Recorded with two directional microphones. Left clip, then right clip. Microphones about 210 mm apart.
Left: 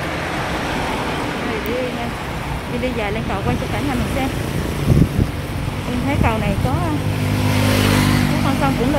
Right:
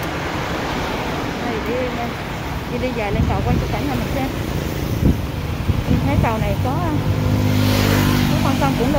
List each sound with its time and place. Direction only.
7.6 s vehicle: 35° left (ahead or behind)